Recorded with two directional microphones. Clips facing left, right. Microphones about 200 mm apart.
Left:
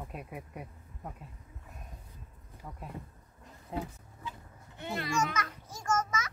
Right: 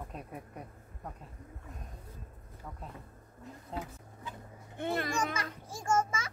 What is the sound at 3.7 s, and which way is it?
Speech, 10° left (ahead or behind).